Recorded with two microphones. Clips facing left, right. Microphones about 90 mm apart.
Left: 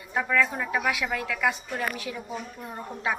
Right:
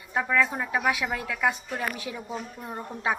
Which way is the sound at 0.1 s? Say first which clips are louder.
Even; 20° right (ahead or behind).